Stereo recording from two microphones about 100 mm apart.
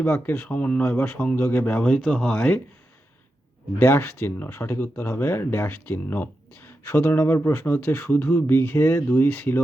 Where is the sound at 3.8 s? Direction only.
20° left (ahead or behind).